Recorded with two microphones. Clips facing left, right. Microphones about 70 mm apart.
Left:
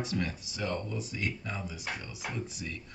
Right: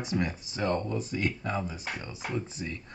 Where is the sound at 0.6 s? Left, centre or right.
Right.